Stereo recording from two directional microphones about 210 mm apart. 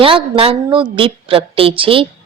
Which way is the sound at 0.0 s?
25° right (ahead or behind).